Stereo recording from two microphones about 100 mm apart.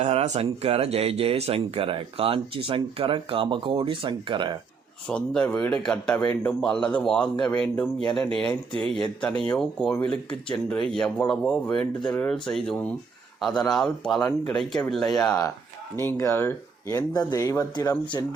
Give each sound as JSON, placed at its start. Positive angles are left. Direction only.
{"t": 0.0, "sound": "speech", "side_deg": -90}
{"t": 5.0, "sound": "speech", "side_deg": 10}
{"t": 15.3, "sound": "speech", "side_deg": 35}
{"t": 16.0, "sound": "speech", "side_deg": 25}
{"t": 17.1, "sound": "speech", "side_deg": 45}
{"t": 17.3, "sound": "speech", "side_deg": 35}